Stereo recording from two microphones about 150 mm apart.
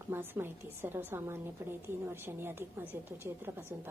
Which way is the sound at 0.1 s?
15° right (ahead or behind).